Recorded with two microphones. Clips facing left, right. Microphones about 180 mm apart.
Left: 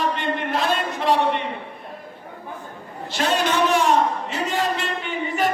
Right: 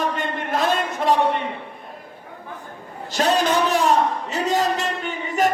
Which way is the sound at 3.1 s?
40° right (ahead or behind).